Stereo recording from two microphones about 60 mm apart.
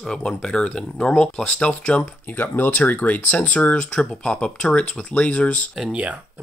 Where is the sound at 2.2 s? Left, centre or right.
Left.